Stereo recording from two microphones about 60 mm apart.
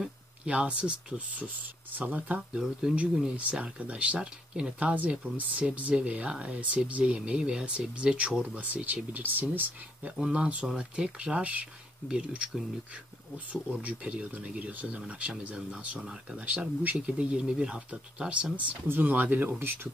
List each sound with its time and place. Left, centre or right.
0.5 s speech: centre
2.5 s speech: centre
3.3 s speech: centre
10.3 s speech: centre
13.8 s speech: right
16.3 s speech: right
18.9 s speech: right